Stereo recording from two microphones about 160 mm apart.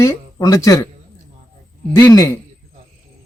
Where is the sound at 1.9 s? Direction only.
20° left (ahead or behind).